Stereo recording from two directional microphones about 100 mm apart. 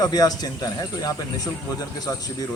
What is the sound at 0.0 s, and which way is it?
Speech, 40° left (ahead or behind).